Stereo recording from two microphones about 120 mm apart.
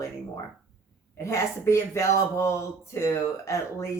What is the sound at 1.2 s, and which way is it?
Speech, 25° left (ahead or behind).